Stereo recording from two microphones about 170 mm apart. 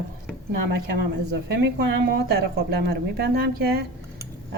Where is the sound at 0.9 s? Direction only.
85° right.